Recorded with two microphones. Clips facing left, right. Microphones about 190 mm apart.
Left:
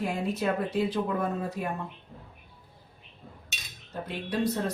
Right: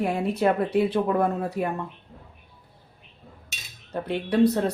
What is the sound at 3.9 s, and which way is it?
Speech, 65° right (ahead or behind).